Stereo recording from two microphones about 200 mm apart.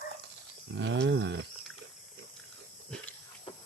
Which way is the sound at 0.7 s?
65° right (ahead or behind).